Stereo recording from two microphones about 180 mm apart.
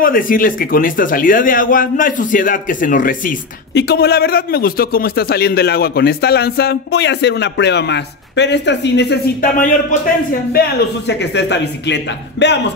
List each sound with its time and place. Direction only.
0.0 s speech: 50° left (ahead or behind)
3.7 s a man's voice: 65° left (ahead or behind)
10.5 s speech: 65° left (ahead or behind)